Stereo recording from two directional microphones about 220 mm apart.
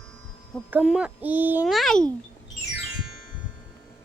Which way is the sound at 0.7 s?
5° right (ahead or behind).